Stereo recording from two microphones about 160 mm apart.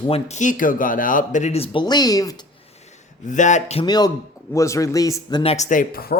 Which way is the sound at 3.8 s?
25° left (ahead or behind).